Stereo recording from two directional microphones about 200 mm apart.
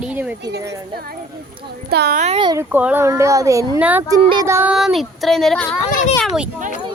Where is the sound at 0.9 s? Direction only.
50° right (ahead or behind).